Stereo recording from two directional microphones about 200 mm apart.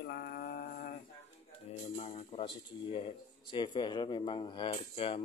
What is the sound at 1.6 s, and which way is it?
Speech, 35° left (ahead or behind).